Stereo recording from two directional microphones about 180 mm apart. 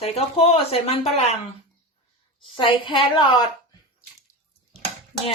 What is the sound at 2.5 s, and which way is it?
Speech, 25° left (ahead or behind).